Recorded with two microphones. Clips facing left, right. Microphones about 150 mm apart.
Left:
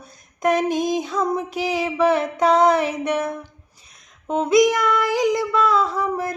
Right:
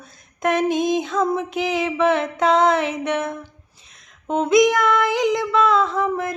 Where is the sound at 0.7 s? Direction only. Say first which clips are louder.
Right 2 dB; 40° left (ahead or behind).